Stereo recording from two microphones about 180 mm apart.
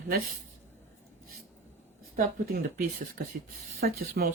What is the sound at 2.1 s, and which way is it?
Speech, 50° right (ahead or behind).